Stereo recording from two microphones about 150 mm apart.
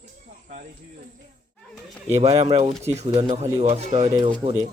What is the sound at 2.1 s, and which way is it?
Speech, 45° right (ahead or behind).